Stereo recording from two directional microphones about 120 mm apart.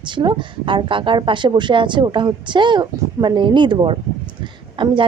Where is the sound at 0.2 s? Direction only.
40° right (ahead or behind).